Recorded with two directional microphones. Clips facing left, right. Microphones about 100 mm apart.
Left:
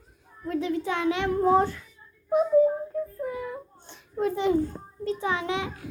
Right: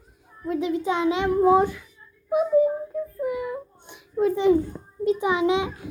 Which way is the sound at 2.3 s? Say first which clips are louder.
Right 1 dB; 5° right (ahead or behind).